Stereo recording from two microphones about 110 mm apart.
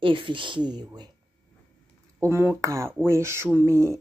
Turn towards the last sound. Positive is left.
turn(degrees=-25)  # may be behind; listen again after turning